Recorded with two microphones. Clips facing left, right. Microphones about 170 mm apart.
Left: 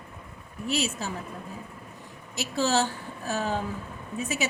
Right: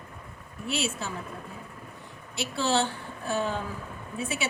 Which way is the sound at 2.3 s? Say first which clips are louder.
Left 1 dB; 40° left (ahead or behind).